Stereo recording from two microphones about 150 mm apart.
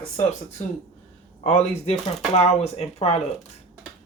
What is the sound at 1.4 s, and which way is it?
Speech, 50° left (ahead or behind).